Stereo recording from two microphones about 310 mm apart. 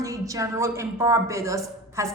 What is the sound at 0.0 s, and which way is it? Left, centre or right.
A woman's voice, centre.